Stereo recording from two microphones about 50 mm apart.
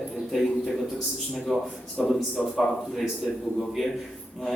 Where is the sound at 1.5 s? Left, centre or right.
Centre.